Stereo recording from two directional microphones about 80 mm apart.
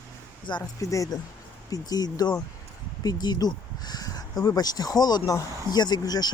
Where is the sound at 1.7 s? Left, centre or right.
Left.